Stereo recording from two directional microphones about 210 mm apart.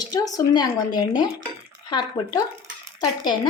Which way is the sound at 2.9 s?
20° left (ahead or behind).